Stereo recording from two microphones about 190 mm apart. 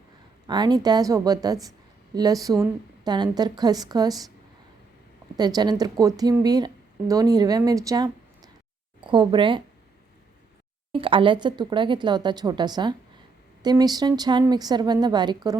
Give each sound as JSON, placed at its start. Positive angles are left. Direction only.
{"t": 0.4, "sound": "speech", "side_deg": -20}
{"t": 5.4, "sound": "speech", "side_deg": -20}
{"t": 10.9, "sound": "speech", "side_deg": -25}